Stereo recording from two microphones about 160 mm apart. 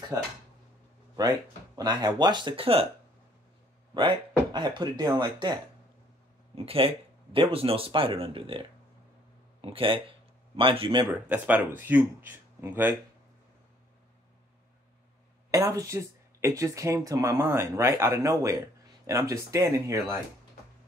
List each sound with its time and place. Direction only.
0.1 s speech: 20° right (ahead or behind)
1.8 s speech: 25° right (ahead or behind)
4.5 s speech: 30° right (ahead or behind)
11.2 s speech: 10° right (ahead or behind)
15.5 s speech: 20° right (ahead or behind)